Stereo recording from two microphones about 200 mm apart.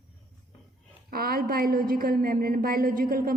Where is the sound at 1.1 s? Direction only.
50° right (ahead or behind).